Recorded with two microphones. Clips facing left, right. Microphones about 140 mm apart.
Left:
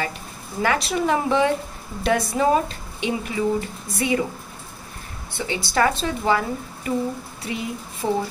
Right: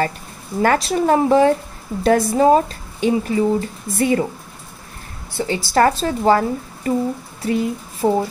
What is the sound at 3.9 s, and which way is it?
Speech, 45° right (ahead or behind).